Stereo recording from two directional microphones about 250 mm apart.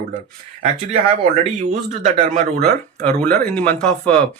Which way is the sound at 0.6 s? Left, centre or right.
Right.